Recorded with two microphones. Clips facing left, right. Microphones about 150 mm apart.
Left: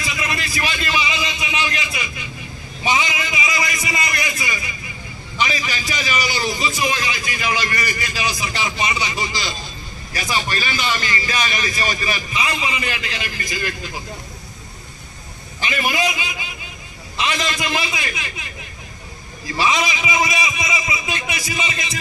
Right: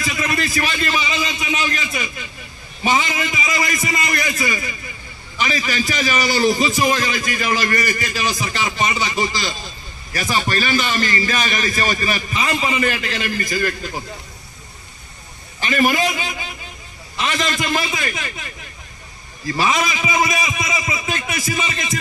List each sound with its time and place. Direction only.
0.0 s a sound: 40° right (ahead or behind)
2.8 s a man's voice: 45° right (ahead or behind)
15.6 s a man's voice: 40° right (ahead or behind)
19.6 s a man's voice: 45° right (ahead or behind)